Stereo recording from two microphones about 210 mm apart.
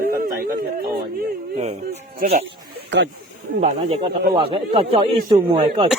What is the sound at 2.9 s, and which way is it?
Speech, 55° right (ahead or behind).